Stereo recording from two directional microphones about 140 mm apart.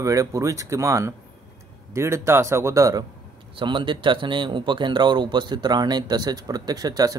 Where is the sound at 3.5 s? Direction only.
35° right (ahead or behind).